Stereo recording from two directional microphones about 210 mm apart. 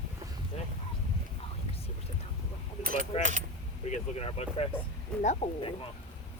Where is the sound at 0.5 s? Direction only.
30° left (ahead or behind).